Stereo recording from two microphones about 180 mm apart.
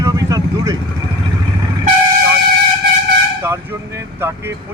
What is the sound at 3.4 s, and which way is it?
Speech, 15° right (ahead or behind).